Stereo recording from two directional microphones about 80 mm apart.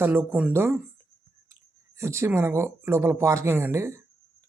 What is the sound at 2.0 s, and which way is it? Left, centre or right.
Speech, right.